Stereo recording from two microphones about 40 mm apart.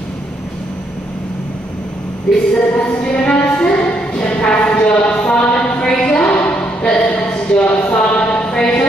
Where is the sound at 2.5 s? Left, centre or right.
Left.